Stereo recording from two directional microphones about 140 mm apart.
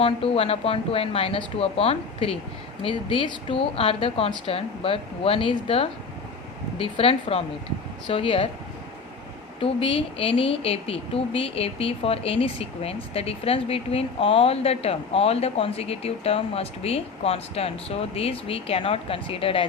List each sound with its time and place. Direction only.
0.0 s a woman's voice: 45° left (ahead or behind)
9.6 s a woman's voice: 40° left (ahead or behind)